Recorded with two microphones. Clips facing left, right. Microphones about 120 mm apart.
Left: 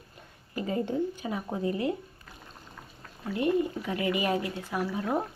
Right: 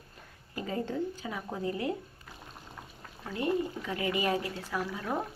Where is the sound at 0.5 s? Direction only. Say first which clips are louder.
Left 4 dB; 20° left (ahead or behind).